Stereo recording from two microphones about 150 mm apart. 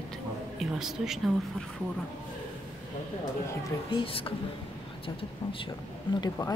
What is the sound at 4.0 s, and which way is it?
Speech, 40° left (ahead or behind).